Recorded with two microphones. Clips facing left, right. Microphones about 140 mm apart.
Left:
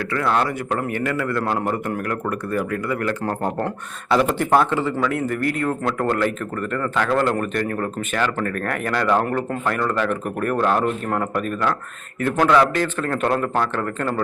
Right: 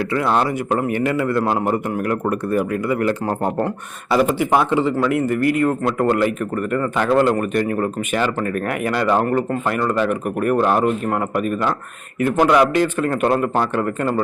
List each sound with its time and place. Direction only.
0.1 s speech: 20° right (ahead or behind)
4.1 s speech: 5° right (ahead or behind)
9.6 s speech: 10° right (ahead or behind)